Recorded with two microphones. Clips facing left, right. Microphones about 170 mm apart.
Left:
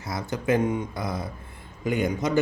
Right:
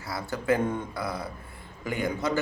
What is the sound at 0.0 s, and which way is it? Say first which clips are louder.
Speech: left 3 dB; 20° left (ahead or behind).